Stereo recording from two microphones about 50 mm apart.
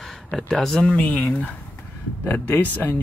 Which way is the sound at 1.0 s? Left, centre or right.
Left.